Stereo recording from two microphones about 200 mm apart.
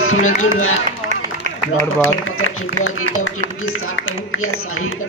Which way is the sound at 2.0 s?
90° left.